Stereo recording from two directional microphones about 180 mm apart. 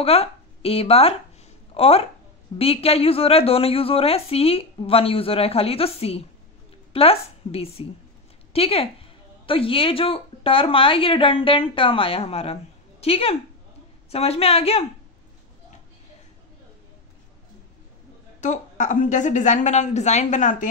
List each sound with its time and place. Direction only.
0.0 s a woman's voice: 35° left (ahead or behind)
18.4 s a woman's voice: 45° left (ahead or behind)